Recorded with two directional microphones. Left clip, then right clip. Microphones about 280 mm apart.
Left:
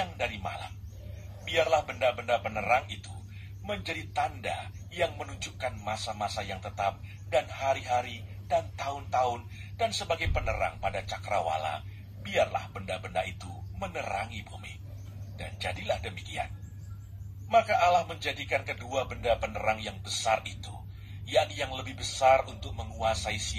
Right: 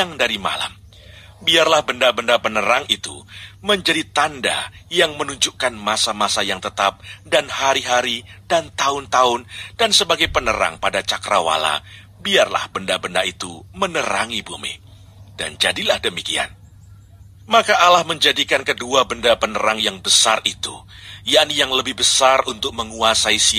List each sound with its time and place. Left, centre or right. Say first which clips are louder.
0.2 s a man's voice: right 15 dB; right
17.6 s a man's voice: right 11 dB; right